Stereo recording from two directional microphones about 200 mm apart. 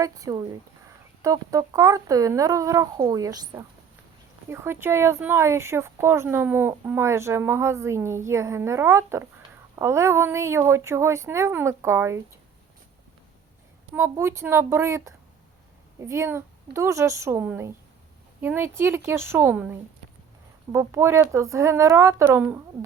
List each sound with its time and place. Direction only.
0.0 s speech: 15° right (ahead or behind)
13.9 s speech: 15° right (ahead or behind)